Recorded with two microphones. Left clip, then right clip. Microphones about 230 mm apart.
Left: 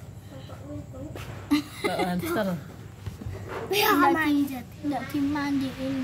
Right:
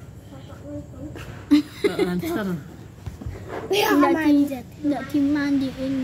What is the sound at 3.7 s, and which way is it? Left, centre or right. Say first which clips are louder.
Speech: right 3 dB; centre.